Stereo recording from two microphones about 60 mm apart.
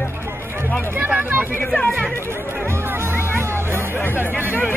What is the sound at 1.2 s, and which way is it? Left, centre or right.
Vehicle, right.